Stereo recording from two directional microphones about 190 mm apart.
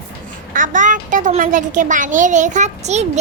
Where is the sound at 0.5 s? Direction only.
45° right (ahead or behind).